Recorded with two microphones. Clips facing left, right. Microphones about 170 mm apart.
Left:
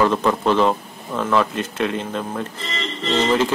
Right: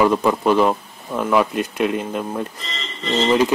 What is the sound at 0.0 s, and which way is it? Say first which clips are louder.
Speech: right 2 dB; 10° right (ahead or behind).